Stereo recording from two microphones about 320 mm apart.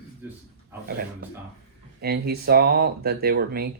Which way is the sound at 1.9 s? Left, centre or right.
Right.